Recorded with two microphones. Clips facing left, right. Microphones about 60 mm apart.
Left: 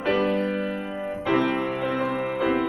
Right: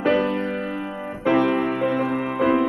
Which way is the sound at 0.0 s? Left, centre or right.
Centre.